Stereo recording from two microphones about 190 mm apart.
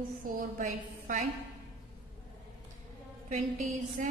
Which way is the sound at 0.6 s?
45° right (ahead or behind).